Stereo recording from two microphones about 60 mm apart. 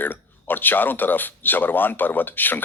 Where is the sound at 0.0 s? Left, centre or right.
Left.